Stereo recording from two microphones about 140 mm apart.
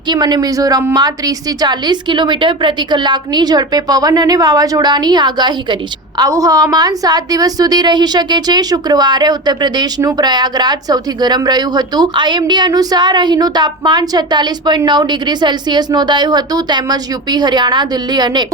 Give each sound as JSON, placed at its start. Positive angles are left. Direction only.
{"t": 0.1, "sound": "a woman's voice", "side_deg": -30}